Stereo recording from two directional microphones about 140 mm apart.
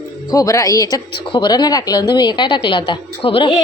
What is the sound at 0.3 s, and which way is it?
A woman's voice, 25° left (ahead or behind).